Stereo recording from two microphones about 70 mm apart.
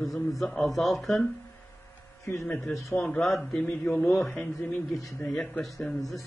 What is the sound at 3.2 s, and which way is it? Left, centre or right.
Speech, centre.